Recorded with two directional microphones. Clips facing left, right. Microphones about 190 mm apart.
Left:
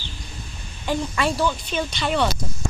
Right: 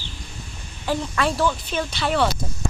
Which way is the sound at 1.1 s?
Centre (ahead or behind).